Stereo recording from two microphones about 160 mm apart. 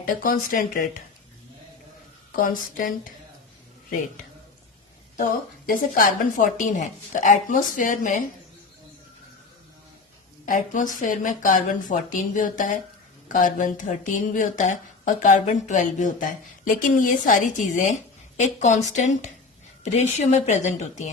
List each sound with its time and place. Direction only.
0.2 s speech: 60° left (ahead or behind)
2.3 s speech: 60° left (ahead or behind)
5.6 s speech: 60° left (ahead or behind)
10.4 s speech: 55° left (ahead or behind)